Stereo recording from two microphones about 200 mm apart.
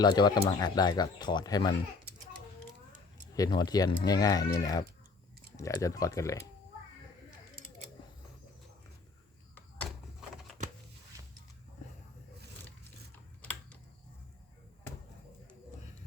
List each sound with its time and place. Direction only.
0.0 s speech: 20° left (ahead or behind)
3.3 s speech: 20° left (ahead or behind)